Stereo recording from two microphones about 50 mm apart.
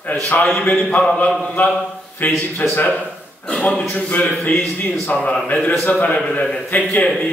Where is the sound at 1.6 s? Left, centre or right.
Left.